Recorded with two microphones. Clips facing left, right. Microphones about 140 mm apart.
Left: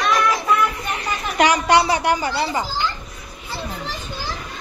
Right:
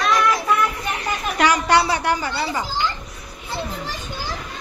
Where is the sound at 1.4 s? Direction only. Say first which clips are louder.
Left 2 dB; 20° left (ahead or behind).